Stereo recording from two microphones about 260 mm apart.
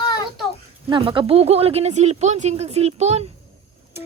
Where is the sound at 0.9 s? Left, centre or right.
Centre.